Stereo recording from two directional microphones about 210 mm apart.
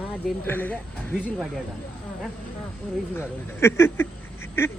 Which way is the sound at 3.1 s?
10° left (ahead or behind).